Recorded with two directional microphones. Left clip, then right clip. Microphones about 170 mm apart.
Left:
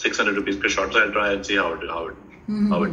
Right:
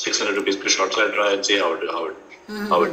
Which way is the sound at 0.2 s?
30° right (ahead or behind).